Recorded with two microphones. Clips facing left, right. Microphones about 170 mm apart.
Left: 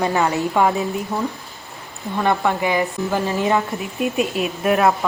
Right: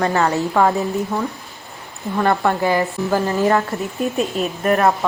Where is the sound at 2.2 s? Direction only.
Centre (ahead or behind).